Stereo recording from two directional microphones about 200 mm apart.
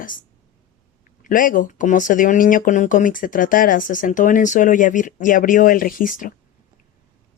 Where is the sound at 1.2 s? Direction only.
40° left (ahead or behind).